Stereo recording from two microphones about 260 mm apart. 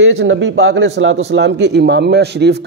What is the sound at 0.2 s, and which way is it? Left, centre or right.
A man's voice, right.